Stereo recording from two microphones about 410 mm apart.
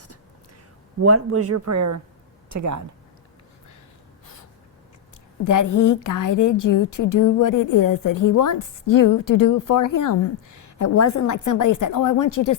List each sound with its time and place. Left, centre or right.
1.0 s speech: right
5.5 s a woman's voice: left